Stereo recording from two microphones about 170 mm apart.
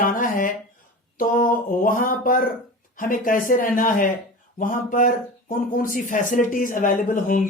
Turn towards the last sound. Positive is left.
turn(degrees=50)  # may be behind; listen again after turning